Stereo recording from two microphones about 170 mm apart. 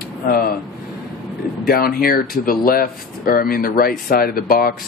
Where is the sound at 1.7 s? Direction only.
60° left (ahead or behind).